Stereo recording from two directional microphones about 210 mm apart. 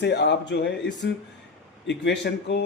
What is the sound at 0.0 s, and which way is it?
Speech, 55° left (ahead or behind).